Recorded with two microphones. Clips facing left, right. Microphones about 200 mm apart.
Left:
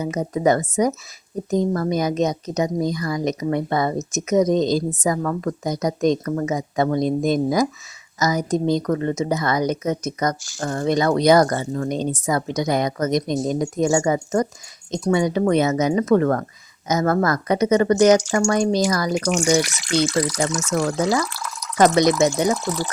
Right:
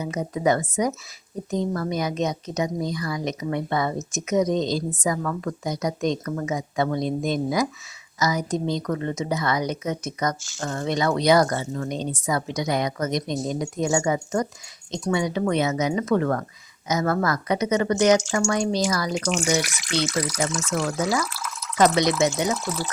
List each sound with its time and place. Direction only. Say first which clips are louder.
0.0 s speech: left 4 dB; 40° left (ahead or behind)
21.8 s speech: left 4 dB; 45° left (ahead or behind)